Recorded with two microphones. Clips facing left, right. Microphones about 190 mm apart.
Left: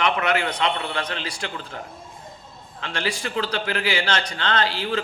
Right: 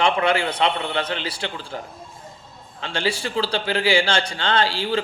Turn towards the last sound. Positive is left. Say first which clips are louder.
# right 2 dB
turn(degrees=-30)  # may be behind; listen again after turning